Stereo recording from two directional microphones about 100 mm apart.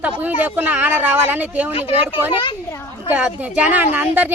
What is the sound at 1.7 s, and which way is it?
Speech, 75° left (ahead or behind).